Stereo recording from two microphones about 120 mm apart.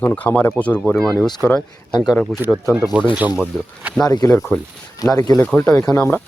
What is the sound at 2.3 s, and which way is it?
Speech, 5° left (ahead or behind).